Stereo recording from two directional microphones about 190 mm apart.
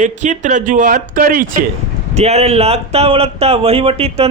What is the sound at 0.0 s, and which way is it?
Speech, 40° right (ahead or behind).